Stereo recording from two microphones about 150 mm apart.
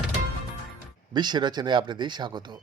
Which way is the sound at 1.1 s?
30° right (ahead or behind).